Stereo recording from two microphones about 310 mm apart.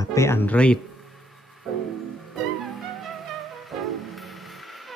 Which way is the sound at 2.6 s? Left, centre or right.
Centre.